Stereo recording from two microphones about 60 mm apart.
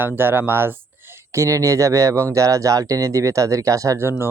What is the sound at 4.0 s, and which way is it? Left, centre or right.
Speech, right.